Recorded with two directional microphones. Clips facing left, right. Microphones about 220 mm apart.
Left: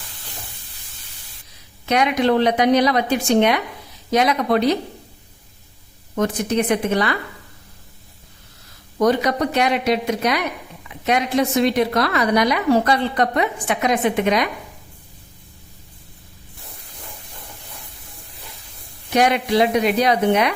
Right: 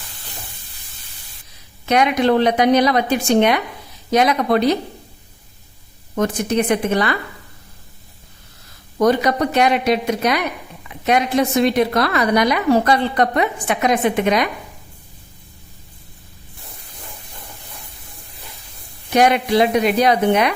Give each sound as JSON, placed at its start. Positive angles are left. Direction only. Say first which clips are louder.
{"t": 1.9, "sound": "a woman's voice", "louder": "right 2 dB", "side_deg": -50}
{"t": 6.1, "sound": "a woman's voice", "louder": "right 1 dB", "side_deg": -45}
{"t": 9.0, "sound": "a woman's voice", "louder": "right 2 dB", "side_deg": -50}
{"t": 19.1, "sound": "a woman's voice", "louder": "right 2 dB", "side_deg": -50}